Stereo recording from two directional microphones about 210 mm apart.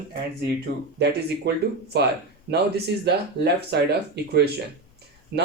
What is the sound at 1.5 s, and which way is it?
Speech, 50° right (ahead or behind).